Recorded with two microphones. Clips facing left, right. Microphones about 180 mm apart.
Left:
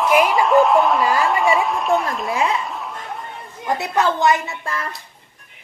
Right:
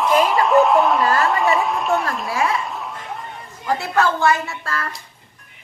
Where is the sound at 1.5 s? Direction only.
Centre (ahead or behind).